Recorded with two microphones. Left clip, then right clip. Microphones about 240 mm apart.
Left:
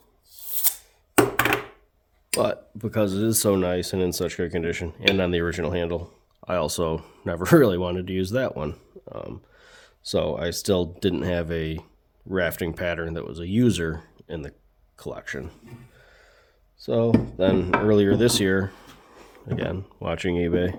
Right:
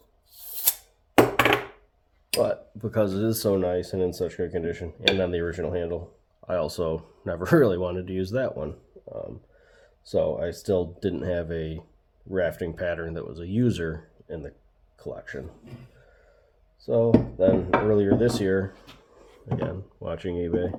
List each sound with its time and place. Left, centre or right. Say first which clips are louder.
2.3 s speech: even; left
2.7 s speech: even; left
16.7 s speech: right 1 dB; left